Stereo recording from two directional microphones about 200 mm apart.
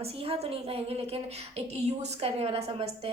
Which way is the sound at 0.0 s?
30° right (ahead or behind).